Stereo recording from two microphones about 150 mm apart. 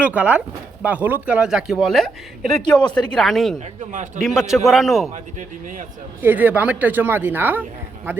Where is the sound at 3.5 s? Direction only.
50° right (ahead or behind).